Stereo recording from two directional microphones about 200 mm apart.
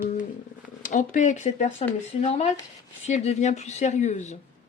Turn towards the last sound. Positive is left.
turn(degrees=35)  # may be behind; listen again after turning